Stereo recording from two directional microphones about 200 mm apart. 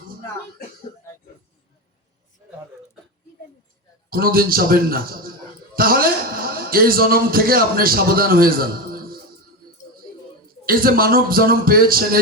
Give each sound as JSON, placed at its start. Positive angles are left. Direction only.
{"t": 4.1, "sound": "a man's voice", "side_deg": -45}
{"t": 10.7, "sound": "a man's voice", "side_deg": -45}